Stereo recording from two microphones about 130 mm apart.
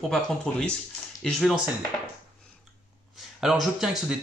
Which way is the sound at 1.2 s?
Centre (ahead or behind).